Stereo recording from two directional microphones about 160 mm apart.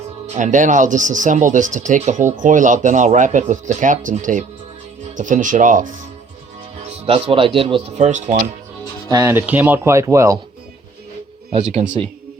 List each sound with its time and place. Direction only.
0.3 s speech: 50° right (ahead or behind)
6.8 s speech: 35° right (ahead or behind)
9.0 s speech: 20° right (ahead or behind)
11.6 s speech: 45° right (ahead or behind)